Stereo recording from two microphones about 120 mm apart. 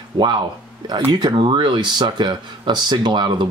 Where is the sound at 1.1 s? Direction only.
40° right (ahead or behind).